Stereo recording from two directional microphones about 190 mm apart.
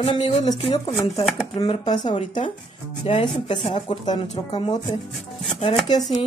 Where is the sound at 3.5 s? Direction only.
30° left (ahead or behind).